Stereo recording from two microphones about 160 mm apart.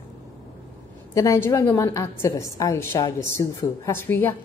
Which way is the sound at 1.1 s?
15° left (ahead or behind).